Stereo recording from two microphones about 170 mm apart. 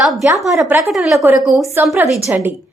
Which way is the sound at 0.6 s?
10° right (ahead or behind).